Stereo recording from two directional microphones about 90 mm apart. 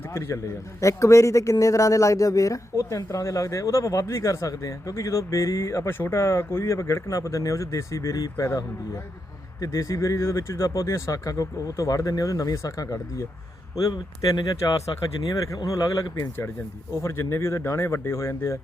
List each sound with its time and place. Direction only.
0.1 s a man's voice: 30° left (ahead or behind)